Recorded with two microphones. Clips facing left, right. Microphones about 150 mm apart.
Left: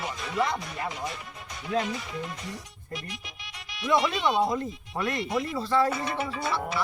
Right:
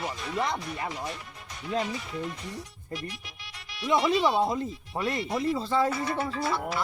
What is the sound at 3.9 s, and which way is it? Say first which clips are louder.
Speech: even; 20° right (ahead or behind).